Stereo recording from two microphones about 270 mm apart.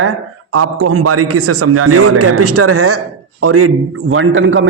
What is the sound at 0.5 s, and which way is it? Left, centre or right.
A man's voice, right.